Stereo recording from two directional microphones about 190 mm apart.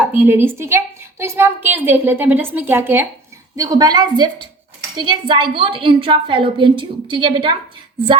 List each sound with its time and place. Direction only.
0.1 s a woman's voice: 10° right (ahead or behind); by 7.5 s 25° right (ahead or behind)